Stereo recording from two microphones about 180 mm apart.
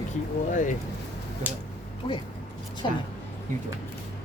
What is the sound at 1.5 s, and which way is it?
Speech, 10° right (ahead or behind).